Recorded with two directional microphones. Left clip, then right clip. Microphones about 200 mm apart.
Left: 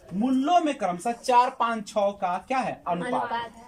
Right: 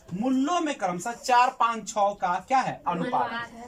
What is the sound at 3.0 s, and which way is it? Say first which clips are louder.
Speech: right 1 dB; 30° left (ahead or behind).